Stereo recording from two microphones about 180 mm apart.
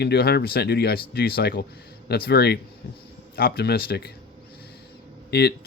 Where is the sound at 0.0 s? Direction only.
65° left (ahead or behind).